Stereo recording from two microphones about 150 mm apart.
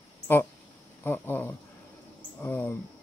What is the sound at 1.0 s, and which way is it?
Speech, 15° left (ahead or behind).